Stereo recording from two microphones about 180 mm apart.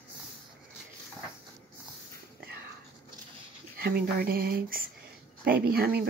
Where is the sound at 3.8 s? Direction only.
60° right (ahead or behind).